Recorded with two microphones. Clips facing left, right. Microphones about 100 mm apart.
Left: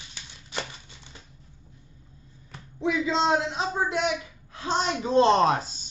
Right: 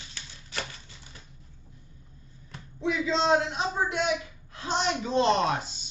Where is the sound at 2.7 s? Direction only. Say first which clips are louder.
Left 2 dB; 25° left (ahead or behind).